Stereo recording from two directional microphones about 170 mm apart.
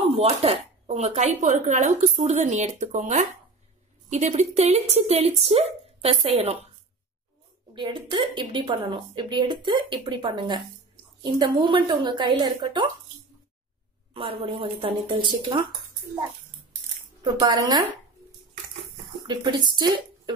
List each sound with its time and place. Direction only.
0.1 s speech: 35° right (ahead or behind)
7.7 s a woman's voice: 25° right (ahead or behind)
14.1 s speech: 35° right (ahead or behind)
17.2 s a woman's voice: 25° right (ahead or behind)
19.2 s speech: 25° right (ahead or behind)